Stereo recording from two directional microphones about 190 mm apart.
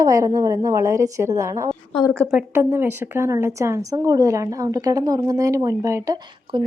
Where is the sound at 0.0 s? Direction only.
15° right (ahead or behind).